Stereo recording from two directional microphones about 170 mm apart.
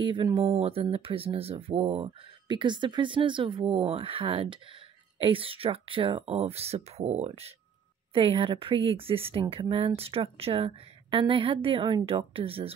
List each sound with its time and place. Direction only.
0.0 s speech: 30° right (ahead or behind)